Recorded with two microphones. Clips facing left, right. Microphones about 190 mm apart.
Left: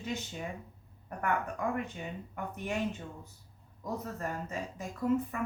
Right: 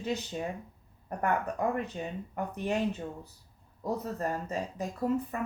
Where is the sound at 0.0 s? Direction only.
35° right (ahead or behind).